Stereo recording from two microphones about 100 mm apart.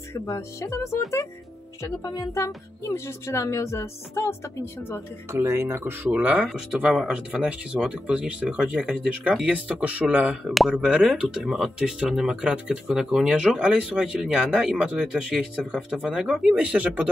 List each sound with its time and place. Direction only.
0.1 s speech: 30° left (ahead or behind)
2.1 s speech: 30° left (ahead or behind)
5.3 s speech: 25° right (ahead or behind)